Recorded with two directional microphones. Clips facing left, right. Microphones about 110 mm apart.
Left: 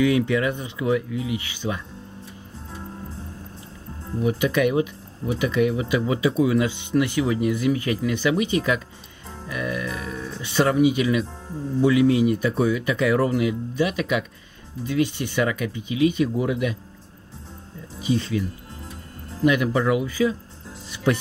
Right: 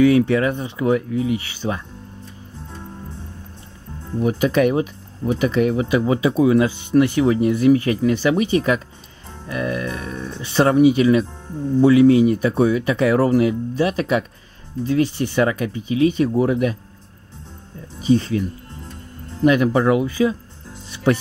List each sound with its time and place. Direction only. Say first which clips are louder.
0.3 s speech: right 4 dB; 30° right (ahead or behind)
4.2 s speech: right 4 dB; 35° right (ahead or behind)
18.0 s speech: right 6 dB; 35° right (ahead or behind)
18.8 s music: right 2 dB; centre (ahead or behind)
19.4 s speech: right 4 dB; 35° right (ahead or behind)